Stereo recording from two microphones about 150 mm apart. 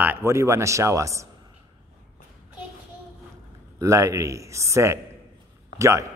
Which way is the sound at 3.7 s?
20° right (ahead or behind).